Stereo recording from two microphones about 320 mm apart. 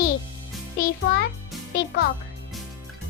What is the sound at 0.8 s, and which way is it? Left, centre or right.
Music, left.